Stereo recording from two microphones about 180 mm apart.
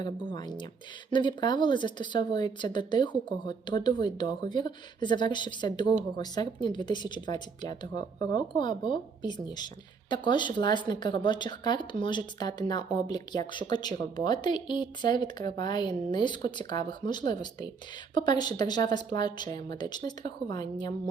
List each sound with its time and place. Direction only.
0.0 s speech: 25° left (ahead or behind)